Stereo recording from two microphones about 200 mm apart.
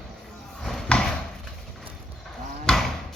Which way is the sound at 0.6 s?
Centre (ahead or behind).